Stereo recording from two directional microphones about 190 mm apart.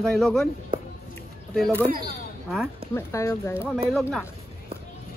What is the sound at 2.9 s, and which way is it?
Speech, 15° left (ahead or behind).